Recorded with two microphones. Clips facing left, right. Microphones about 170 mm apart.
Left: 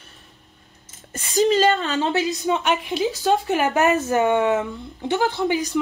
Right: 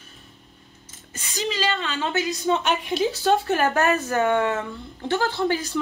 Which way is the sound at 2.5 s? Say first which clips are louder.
Left 1 dB; 5° left (ahead or behind).